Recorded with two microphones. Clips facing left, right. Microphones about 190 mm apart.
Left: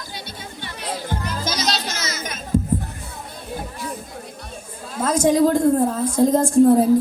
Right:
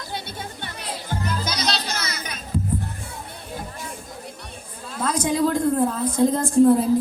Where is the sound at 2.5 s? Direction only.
45° left (ahead or behind).